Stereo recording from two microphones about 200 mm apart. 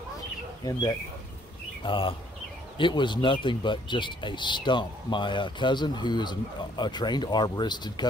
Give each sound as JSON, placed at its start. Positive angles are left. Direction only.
{"t": 0.7, "sound": "speech", "side_deg": 20}